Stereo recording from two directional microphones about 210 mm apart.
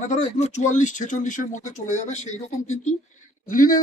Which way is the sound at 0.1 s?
35° left (ahead or behind).